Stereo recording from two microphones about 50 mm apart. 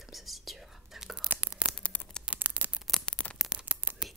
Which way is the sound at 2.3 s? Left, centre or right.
Centre.